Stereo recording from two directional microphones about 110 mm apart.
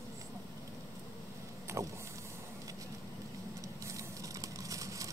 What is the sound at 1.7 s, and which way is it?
Vehicle, 25° right (ahead or behind).